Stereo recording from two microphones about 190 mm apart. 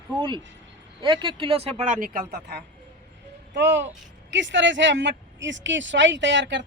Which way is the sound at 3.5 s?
65° right (ahead or behind).